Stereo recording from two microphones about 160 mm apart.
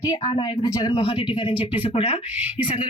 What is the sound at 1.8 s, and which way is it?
Speech, 35° left (ahead or behind).